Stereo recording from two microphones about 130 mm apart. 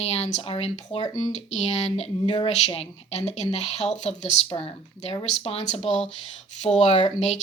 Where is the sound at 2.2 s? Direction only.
40° left (ahead or behind).